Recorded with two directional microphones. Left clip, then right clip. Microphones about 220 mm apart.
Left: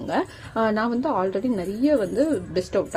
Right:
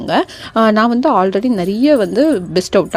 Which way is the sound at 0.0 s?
30° right (ahead or behind).